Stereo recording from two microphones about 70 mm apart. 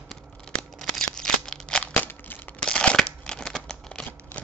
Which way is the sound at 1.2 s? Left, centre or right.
Centre.